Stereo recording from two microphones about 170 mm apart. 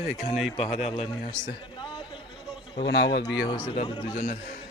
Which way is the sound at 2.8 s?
90° left.